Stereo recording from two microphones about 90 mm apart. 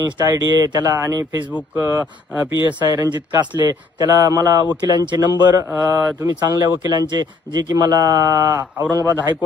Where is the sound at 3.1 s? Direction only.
50° right (ahead or behind).